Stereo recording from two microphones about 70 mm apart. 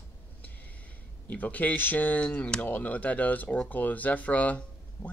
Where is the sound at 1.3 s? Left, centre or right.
Left.